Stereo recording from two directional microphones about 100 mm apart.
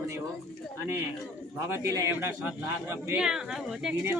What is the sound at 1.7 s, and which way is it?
Speech, 30° right (ahead or behind).